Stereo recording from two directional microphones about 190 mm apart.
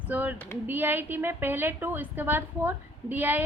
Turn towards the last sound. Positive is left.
turn(degrees=-10)  # may be behind; listen again after turning